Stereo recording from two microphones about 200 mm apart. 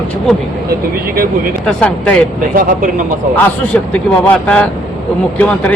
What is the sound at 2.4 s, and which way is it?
Speech, 45° right (ahead or behind).